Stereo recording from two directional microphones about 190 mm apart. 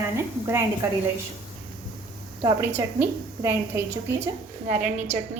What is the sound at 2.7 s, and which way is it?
A woman's voice, 15° right (ahead or behind).